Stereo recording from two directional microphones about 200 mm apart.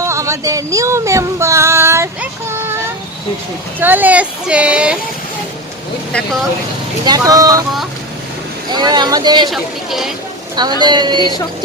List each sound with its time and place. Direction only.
0.0 s child singing: 15° right (ahead or behind)
3.8 s speech: 10° right (ahead or behind)
7.0 s speech: 20° right (ahead or behind)
8.7 s speech: 20° right (ahead or behind)
9.5 s speech: centre (ahead or behind)
10.5 s speech: 20° right (ahead or behind)